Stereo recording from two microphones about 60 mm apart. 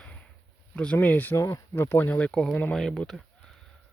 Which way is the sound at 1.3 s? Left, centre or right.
Left.